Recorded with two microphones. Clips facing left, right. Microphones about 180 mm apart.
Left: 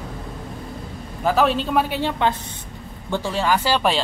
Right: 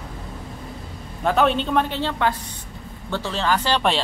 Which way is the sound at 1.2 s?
Centre (ahead or behind).